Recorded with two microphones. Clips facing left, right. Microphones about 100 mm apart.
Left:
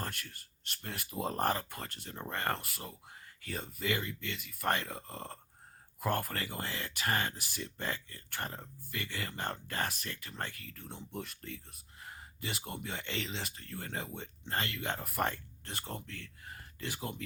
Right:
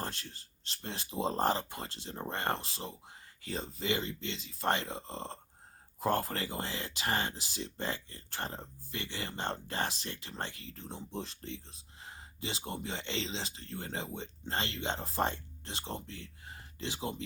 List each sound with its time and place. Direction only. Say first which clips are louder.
0.0 s speech: right 1 dB; 30° right (ahead or behind)